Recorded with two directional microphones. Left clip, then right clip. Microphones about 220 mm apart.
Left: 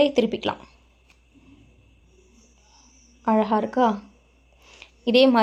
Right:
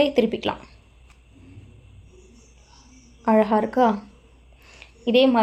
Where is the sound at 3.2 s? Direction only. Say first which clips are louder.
Right 2 dB; 5° left (ahead or behind).